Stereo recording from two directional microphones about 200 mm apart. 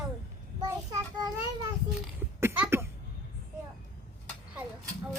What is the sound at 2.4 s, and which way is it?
Cough, 10° right (ahead or behind).